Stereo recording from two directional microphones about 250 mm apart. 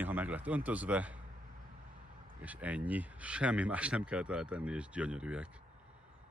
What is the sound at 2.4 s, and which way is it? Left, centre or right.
Speech, centre.